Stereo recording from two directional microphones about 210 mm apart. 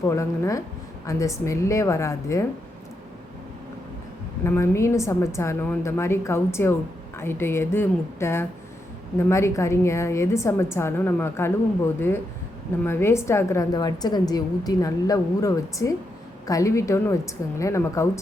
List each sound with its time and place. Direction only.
0.0 s a woman's voice: 15° left (ahead or behind)
4.4 s a woman's voice: 10° left (ahead or behind)